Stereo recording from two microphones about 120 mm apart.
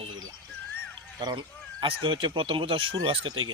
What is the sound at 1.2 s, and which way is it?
Speech, 40° right (ahead or behind).